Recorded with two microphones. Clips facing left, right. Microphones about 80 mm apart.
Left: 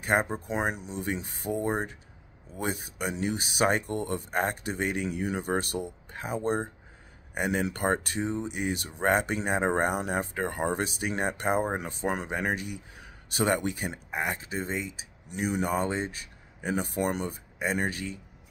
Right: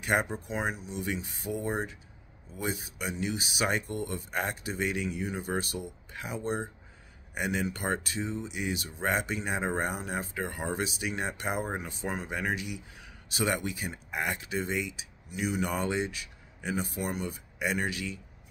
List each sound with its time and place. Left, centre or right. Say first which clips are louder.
0.0 s speech: left 2 dB; left
0.5 s speech: left 3 dB; left
0.9 s speech: left 2 dB; left
14.1 s speech: even; left
15.2 s speech: left 2 dB; left
15.6 s speech: left 1 dB; left
17.3 s speech: left 1 dB; left